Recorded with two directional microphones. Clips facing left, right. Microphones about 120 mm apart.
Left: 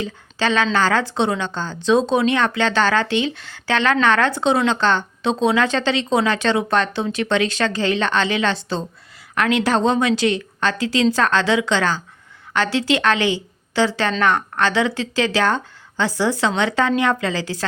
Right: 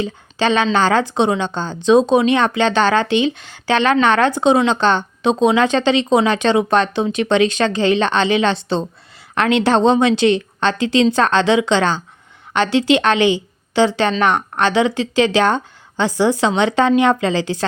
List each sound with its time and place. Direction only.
0.0 s speech: 20° right (ahead or behind)